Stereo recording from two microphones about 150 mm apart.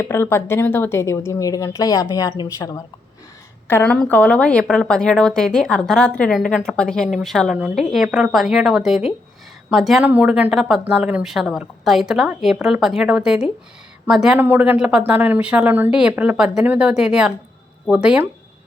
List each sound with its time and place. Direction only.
0.0 s a woman's voice: 15° left (ahead or behind)
3.7 s a woman's voice: 10° left (ahead or behind); by 18.3 s 5° right (ahead or behind)